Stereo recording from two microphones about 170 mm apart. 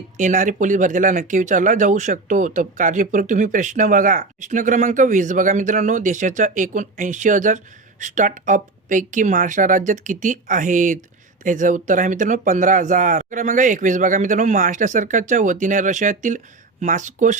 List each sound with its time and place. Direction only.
0.2 s speech: 50° right (ahead or behind)